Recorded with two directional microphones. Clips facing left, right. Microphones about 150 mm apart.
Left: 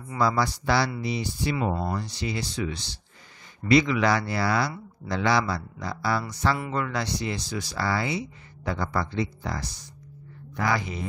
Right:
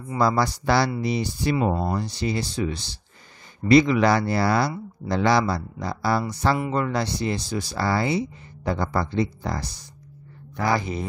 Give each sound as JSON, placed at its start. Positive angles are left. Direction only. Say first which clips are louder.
{"t": 0.2, "sound": "speech", "louder": "right 3 dB", "side_deg": -40}
{"t": 1.6, "sound": "speech", "louder": "right 4 dB", "side_deg": -30}
{"t": 10.7, "sound": "speech", "louder": "right 4 dB", "side_deg": -35}